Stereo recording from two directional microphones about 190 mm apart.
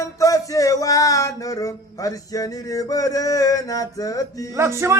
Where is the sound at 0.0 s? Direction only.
15° left (ahead or behind).